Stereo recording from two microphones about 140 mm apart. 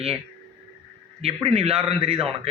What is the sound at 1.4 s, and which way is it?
Speech, 45° right (ahead or behind).